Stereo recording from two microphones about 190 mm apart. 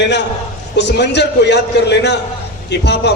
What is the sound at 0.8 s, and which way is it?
A man's voice, 65° left (ahead or behind).